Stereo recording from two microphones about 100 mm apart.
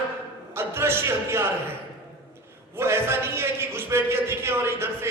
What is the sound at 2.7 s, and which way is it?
A man's voice, 25° right (ahead or behind).